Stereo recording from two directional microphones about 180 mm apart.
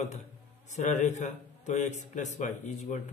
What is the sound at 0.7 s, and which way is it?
A man's voice, 40° left (ahead or behind).